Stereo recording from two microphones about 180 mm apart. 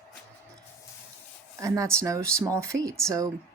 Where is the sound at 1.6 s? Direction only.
15° right (ahead or behind).